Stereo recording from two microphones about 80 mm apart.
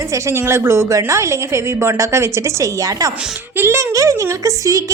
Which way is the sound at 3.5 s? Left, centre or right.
Right.